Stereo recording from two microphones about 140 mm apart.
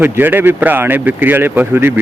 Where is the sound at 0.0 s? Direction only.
15° right (ahead or behind).